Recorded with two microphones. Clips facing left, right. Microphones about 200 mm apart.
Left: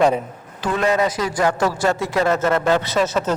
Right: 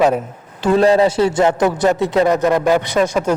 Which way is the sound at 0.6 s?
30° right (ahead or behind).